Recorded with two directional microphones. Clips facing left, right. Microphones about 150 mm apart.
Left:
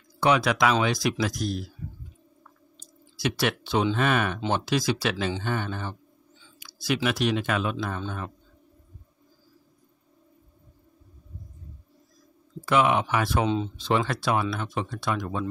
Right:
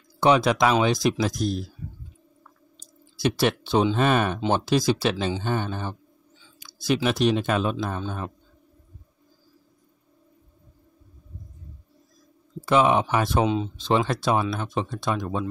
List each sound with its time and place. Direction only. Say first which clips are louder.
0.2 s speech: right 3 dB; 25° right (ahead or behind)
3.2 s speech: right 4 dB; 30° right (ahead or behind)
12.6 s speech: right 3 dB; 25° right (ahead or behind)